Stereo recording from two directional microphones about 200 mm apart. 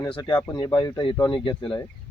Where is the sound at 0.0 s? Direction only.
20° left (ahead or behind).